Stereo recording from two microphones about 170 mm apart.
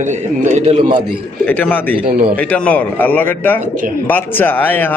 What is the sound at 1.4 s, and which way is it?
A man's voice, 10° left (ahead or behind).